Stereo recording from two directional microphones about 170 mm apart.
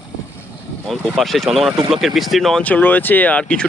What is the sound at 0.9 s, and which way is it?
Speech, centre (ahead or behind).